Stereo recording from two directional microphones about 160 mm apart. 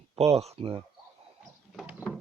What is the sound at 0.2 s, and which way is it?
Speech, 40° right (ahead or behind).